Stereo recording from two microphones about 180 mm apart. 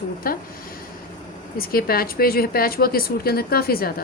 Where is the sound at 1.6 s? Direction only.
55° left (ahead or behind).